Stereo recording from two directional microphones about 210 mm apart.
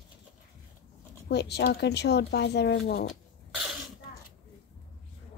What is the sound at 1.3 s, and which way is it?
Speech, 50° left (ahead or behind).